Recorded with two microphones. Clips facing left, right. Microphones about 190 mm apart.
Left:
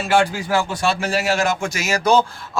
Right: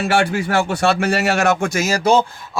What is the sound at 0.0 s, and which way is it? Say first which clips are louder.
Speech: right 1 dB; 70° right (ahead or behind).